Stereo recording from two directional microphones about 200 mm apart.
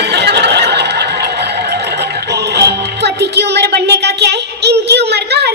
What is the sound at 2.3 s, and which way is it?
Music, 55° right (ahead or behind).